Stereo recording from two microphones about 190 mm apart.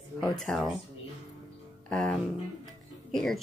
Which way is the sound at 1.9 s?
5° left (ahead or behind).